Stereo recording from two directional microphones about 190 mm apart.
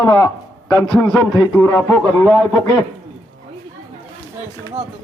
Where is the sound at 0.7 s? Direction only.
10° left (ahead or behind).